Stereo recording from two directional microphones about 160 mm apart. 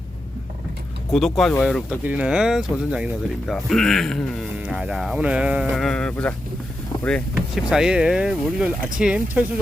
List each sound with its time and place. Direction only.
1.1 s speech: centre (ahead or behind)
1.9 s speech: 10° right (ahead or behind); by 6.3 s 5° left (ahead or behind)
6.9 s vehicle: 25° left (ahead or behind)
7.5 s speech: 5° right (ahead or behind)